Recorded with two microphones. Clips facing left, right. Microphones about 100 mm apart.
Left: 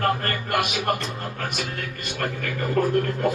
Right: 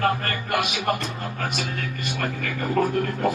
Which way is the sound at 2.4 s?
45° left (ahead or behind).